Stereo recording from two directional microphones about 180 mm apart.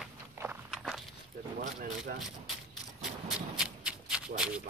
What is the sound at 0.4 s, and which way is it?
Walk, 5° right (ahead or behind).